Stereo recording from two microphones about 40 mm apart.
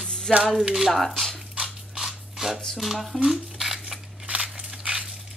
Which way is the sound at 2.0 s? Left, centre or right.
Centre.